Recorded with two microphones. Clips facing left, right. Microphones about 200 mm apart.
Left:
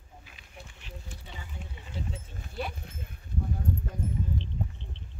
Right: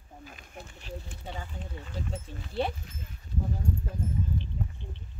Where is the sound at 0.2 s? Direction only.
45° right (ahead or behind).